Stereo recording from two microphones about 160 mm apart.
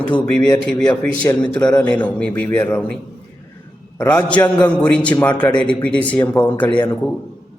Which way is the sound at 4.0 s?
10° left (ahead or behind).